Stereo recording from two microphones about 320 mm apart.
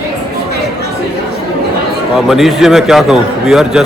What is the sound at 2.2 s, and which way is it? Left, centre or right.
A man's voice, centre.